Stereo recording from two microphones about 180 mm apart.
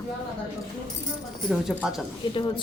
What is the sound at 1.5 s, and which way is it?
Speech, centre (ahead or behind).